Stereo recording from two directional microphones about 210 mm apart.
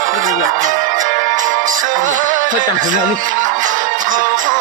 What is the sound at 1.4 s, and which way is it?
Music, 40° right (ahead or behind).